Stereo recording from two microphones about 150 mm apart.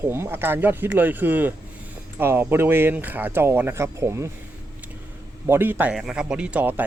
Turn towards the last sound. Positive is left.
turn(degrees=-10)  # may be behind; listen again after turning